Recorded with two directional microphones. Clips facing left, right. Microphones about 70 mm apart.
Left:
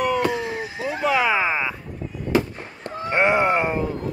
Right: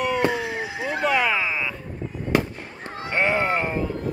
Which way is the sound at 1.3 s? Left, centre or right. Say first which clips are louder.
Left 3 dB; left.